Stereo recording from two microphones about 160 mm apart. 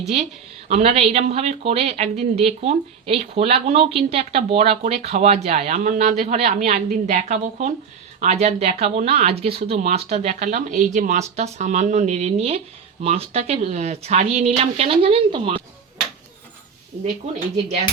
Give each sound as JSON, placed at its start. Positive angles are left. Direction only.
{"t": 0.7, "sound": "speech", "side_deg": -40}